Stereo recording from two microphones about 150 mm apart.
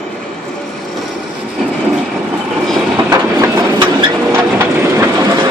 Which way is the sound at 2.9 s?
25° right (ahead or behind).